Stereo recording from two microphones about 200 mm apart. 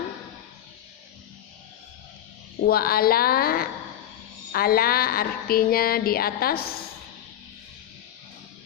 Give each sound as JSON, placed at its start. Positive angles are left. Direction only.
{"t": 2.6, "sound": "speech", "side_deg": 50}